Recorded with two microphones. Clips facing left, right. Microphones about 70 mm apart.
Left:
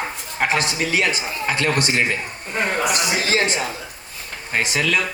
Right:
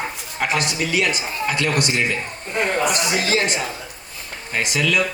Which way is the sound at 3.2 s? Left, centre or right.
Left.